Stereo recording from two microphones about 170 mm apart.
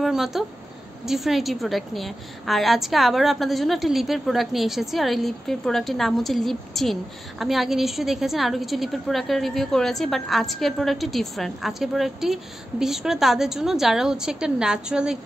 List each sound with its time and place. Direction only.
0.0 s a woman's voice: centre (ahead or behind)